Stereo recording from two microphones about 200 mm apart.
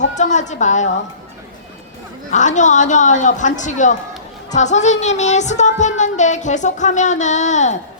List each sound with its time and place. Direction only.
0.0 s speech: 35° left (ahead or behind)
2.3 s speech: 35° left (ahead or behind)